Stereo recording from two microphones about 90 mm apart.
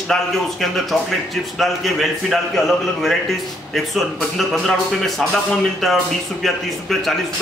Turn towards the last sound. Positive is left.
turn(degrees=0)  # may be behind; listen again after turning